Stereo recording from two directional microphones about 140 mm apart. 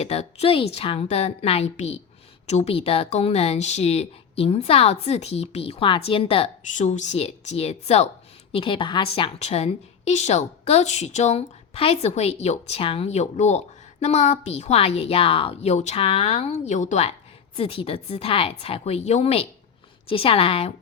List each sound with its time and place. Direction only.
0.0 s a woman's voice: 50° left (ahead or behind)
6.7 s a woman's voice: 60° left (ahead or behind)
8.5 s a woman's voice: 35° left (ahead or behind); by 17.2 s 55° left (ahead or behind)
17.6 s a woman's voice: 40° left (ahead or behind)